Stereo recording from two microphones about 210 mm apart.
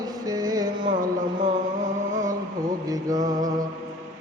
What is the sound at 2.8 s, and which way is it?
Music, 15° right (ahead or behind).